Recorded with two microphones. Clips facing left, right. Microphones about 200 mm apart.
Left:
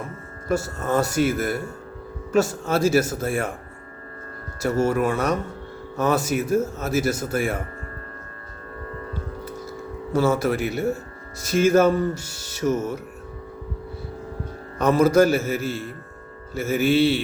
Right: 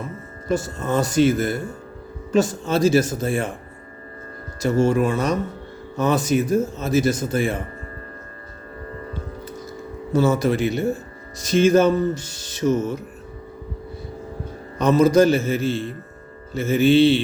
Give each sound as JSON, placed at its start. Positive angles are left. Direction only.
{"t": 0.9, "sound": "speech", "side_deg": 5}
{"t": 4.6, "sound": "speech", "side_deg": 5}
{"t": 9.4, "sound": "music", "side_deg": 10}
{"t": 11.6, "sound": "speech", "side_deg": 5}
{"t": 14.8, "sound": "speech", "side_deg": 10}
{"t": 15.6, "sound": "a man's voice", "side_deg": -25}
{"t": 16.6, "sound": "speech", "side_deg": 5}